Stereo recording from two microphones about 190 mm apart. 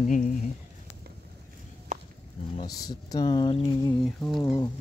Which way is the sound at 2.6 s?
20° left (ahead or behind).